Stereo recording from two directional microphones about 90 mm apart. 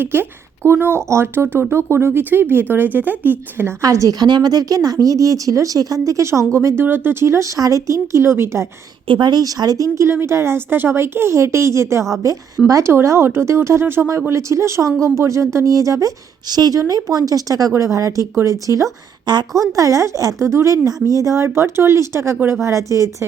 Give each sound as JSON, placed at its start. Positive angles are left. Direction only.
{"t": 0.0, "sound": "speech", "side_deg": -25}
{"t": 3.8, "sound": "speech", "side_deg": -35}
{"t": 9.0, "sound": "speech", "side_deg": -55}
{"t": 19.2, "sound": "a woman's voice", "side_deg": -55}
{"t": 19.7, "sound": "speech", "side_deg": -35}